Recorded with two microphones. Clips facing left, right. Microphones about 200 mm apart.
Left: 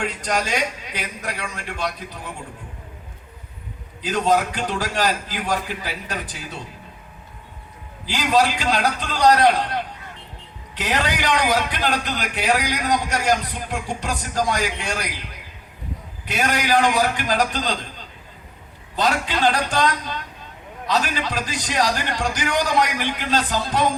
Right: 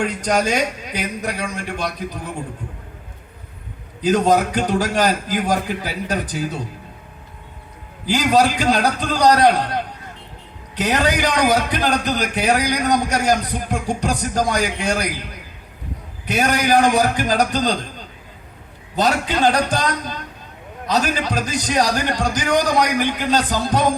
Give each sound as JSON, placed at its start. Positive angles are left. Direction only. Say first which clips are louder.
{"t": 0.0, "sound": "a man's voice", "louder": "right 5 dB", "side_deg": -45}
{"t": 4.0, "sound": "a man's voice", "louder": "right 4 dB", "side_deg": -45}
{"t": 8.0, "sound": "a man's voice", "louder": "right 3 dB", "side_deg": -45}
{"t": 10.8, "sound": "a man's voice", "louder": "right 5 dB", "side_deg": -40}
{"t": 16.3, "sound": "a man's voice", "louder": "right 4 dB", "side_deg": -45}
{"t": 18.9, "sound": "a man's voice", "louder": "right 3 dB", "side_deg": -40}